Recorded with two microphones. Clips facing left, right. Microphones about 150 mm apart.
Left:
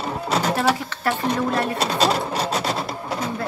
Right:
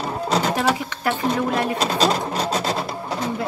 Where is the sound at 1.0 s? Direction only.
15° right (ahead or behind).